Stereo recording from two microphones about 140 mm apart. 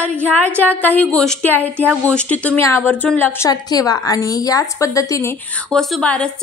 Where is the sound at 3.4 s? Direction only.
25° left (ahead or behind).